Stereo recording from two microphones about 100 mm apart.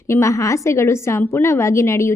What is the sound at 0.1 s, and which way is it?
A woman's voice, 30° left (ahead or behind).